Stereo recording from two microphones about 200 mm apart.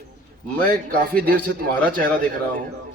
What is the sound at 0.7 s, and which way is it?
Speech, 45° right (ahead or behind).